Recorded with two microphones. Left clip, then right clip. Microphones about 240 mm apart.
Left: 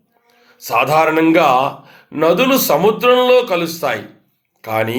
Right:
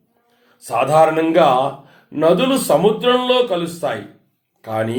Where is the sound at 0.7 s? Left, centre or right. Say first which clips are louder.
Left 1 dB; left.